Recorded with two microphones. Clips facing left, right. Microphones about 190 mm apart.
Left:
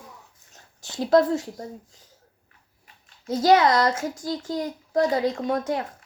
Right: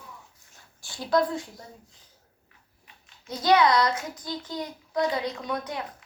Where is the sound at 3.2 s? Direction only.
45° left (ahead or behind).